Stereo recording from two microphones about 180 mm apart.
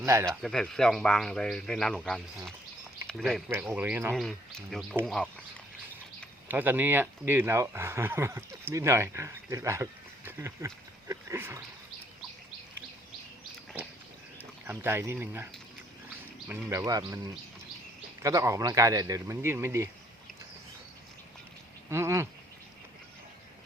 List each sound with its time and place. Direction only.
0.0 s speech: 15° right (ahead or behind)
0.4 s speech: 5° left (ahead or behind)
3.5 s speech: 10° right (ahead or behind)
4.1 s speech: centre (ahead or behind)
6.5 s speech: 10° right (ahead or behind)
11.1 s dog: 15° right (ahead or behind)
14.7 s speech: 15° right (ahead or behind)
16.5 s speech: 15° right (ahead or behind)
21.8 s a sound: 15° right (ahead or behind)